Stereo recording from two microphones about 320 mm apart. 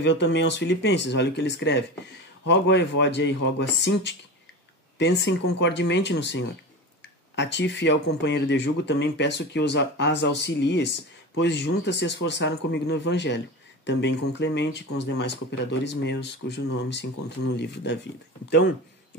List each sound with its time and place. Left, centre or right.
0.0 s speech: left